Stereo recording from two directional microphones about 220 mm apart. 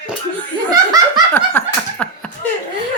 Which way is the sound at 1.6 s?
10° left (ahead or behind).